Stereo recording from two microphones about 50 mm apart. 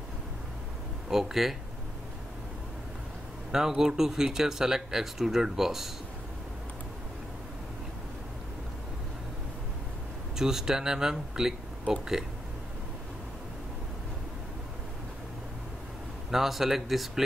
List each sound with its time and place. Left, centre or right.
1.1 s speech: centre
3.5 s speech: centre
10.3 s speech: centre
16.3 s speech: centre